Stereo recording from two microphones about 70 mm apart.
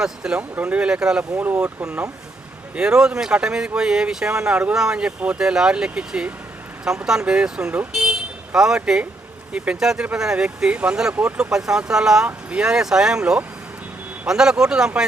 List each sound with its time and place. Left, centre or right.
0.0 s speech: centre
0.3 s speech: right
11.1 s speech: right
11.3 s speech: centre